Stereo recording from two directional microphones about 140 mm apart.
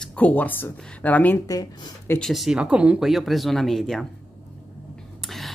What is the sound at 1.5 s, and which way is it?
Speech, 25° left (ahead or behind).